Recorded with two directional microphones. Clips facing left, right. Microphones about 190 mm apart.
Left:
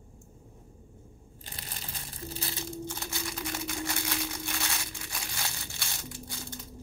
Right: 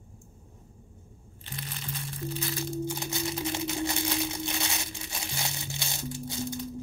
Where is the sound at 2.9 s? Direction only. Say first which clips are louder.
Right 6 dB; 20° right (ahead or behind).